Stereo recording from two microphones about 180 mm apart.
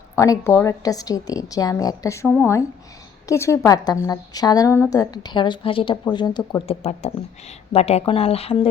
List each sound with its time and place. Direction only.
0.2 s a woman's voice: 20° left (ahead or behind)